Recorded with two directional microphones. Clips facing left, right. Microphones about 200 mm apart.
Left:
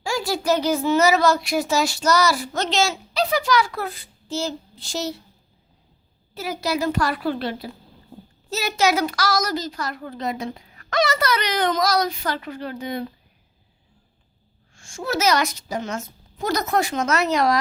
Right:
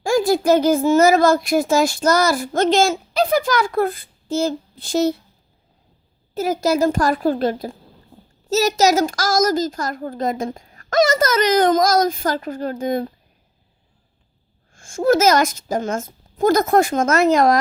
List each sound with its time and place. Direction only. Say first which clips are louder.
0.0 s speech: right 8 dB; 50° right (ahead or behind)
6.3 s speech: right 7 dB; 45° right (ahead or behind)
14.7 s speech: right 11 dB; 50° right (ahead or behind)